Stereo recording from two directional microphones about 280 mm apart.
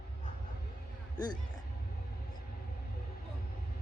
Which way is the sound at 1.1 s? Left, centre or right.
Centre.